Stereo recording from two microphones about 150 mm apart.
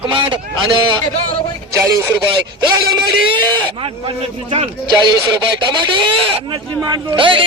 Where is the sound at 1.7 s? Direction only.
20° right (ahead or behind).